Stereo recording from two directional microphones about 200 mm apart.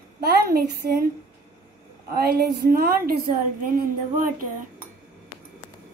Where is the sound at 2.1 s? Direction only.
50° right (ahead or behind).